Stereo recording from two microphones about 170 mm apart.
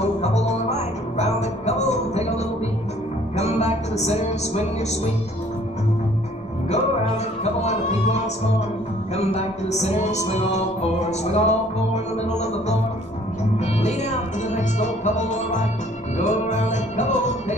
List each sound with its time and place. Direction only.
0.2 s music: 40° left (ahead or behind)
7.6 s music: 40° left (ahead or behind)